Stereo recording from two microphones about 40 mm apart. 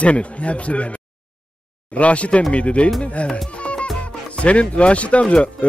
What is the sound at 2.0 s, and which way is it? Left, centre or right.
Speech, left.